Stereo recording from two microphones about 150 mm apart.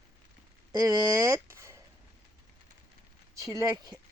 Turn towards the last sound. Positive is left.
turn(degrees=-20)  # may be behind; listen again after turning